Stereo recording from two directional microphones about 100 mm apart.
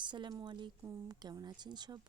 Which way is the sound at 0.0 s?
50° right (ahead or behind).